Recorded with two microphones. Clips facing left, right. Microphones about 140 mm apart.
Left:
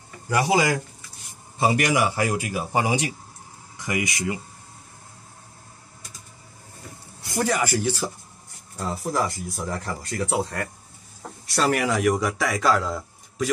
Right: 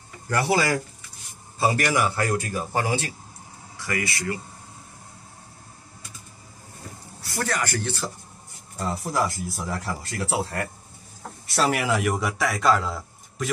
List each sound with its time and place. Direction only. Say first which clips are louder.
0.3 s speech: left 1 dB; 15° left (ahead or behind)
7.2 s a man's voice: left 4 dB; 20° left (ahead or behind)
8.7 s speech: even; centre (ahead or behind)